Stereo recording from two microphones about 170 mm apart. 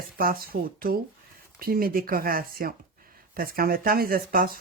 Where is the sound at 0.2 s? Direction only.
60° right (ahead or behind).